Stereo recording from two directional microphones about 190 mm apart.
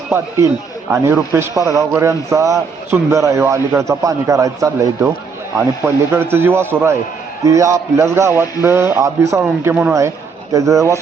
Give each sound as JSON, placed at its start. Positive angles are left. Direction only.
{"t": 0.9, "sound": "a man's voice", "side_deg": -15}